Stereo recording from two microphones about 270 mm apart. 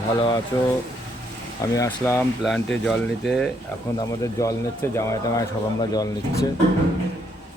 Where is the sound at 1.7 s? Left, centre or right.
Centre.